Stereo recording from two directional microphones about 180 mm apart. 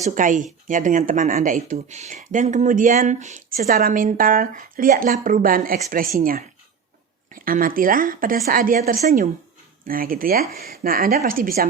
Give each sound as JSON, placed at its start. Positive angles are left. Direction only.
{"t": 0.0, "sound": "speech", "side_deg": -45}